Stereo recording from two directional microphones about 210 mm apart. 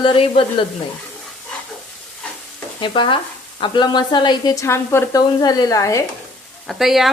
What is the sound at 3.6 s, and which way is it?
A woman's voice, 20° left (ahead or behind).